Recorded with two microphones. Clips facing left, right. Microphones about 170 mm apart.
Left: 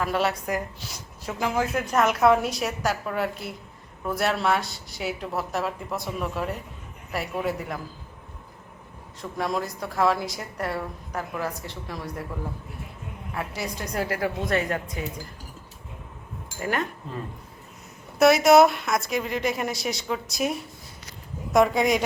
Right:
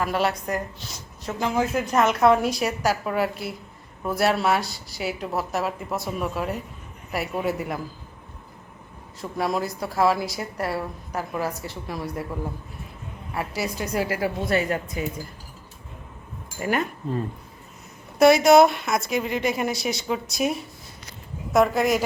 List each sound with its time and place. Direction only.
0.0 s a woman's voice: centre (ahead or behind)
9.4 s a woman's voice: 5° right (ahead or behind)
13.3 s a woman's voice: 5° right (ahead or behind)
16.6 s a woman's voice: 10° right (ahead or behind)
18.2 s a woman's voice: centre (ahead or behind)